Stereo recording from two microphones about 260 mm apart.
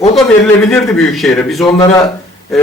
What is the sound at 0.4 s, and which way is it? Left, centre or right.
A man's voice, centre.